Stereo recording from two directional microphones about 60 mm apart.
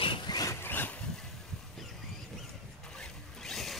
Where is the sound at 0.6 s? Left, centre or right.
Left.